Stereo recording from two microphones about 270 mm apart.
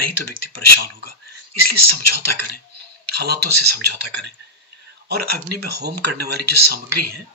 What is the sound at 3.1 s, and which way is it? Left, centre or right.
Speech, right.